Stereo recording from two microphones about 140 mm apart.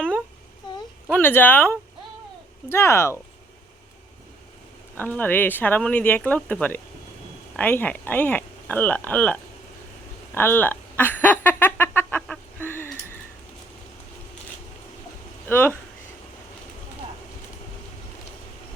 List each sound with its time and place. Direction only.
1.1 s speech: 15° left (ahead or behind)
4.9 s speech: 10° left (ahead or behind)
10.3 s a sound: 15° left (ahead or behind)
15.4 s speech: 15° left (ahead or behind)